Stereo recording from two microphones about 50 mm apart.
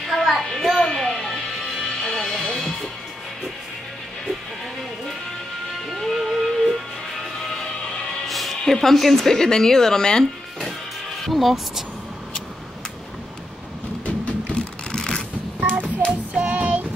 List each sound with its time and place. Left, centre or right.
0.1 s a sound: centre
1.0 s music: centre
5.9 s music: centre
8.8 s a woman's voice: centre
11.2 s speech: centre
14.0 s a sound: left
16.1 s child singing: right